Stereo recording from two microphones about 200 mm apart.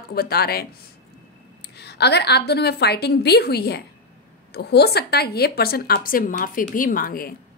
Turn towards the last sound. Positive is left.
turn(degrees=45)  # may be behind; listen again after turning